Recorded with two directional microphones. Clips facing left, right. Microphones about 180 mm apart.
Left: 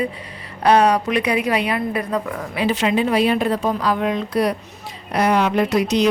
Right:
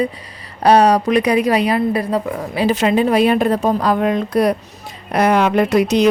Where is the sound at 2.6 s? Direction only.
45° right (ahead or behind).